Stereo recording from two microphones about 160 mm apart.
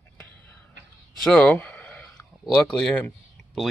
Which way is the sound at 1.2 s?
5° left (ahead or behind).